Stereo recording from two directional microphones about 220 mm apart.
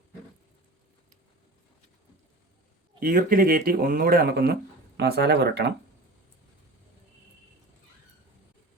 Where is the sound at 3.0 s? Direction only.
40° right (ahead or behind).